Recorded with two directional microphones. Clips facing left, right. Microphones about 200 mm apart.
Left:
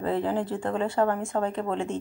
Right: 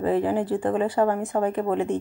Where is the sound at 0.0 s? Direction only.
15° right (ahead or behind).